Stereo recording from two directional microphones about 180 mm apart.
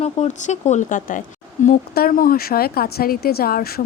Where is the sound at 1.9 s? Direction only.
55° left (ahead or behind).